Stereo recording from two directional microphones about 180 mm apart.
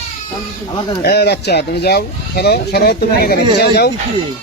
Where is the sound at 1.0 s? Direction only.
65° left (ahead or behind).